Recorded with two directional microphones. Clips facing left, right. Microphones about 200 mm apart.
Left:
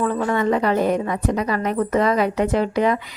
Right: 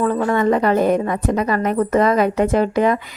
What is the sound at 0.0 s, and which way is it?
A woman's voice, 45° right (ahead or behind).